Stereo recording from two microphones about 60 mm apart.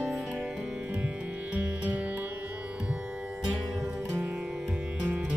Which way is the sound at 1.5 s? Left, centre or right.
Right.